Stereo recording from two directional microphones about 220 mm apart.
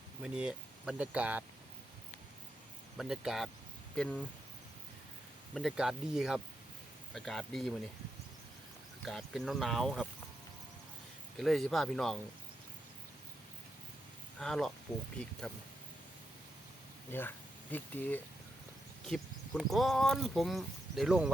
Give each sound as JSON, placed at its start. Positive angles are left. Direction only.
{"t": 0.2, "sound": "speech", "side_deg": -5}
{"t": 3.0, "sound": "speech", "side_deg": 0}
{"t": 5.5, "sound": "speech", "side_deg": 0}
{"t": 9.0, "sound": "speech", "side_deg": 0}
{"t": 11.3, "sound": "speech", "side_deg": 0}
{"t": 14.3, "sound": "speech", "side_deg": 5}
{"t": 17.1, "sound": "speech", "side_deg": 10}